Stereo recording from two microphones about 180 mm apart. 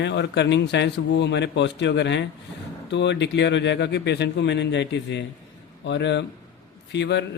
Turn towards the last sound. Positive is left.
turn(degrees=70)  # may be behind; listen again after turning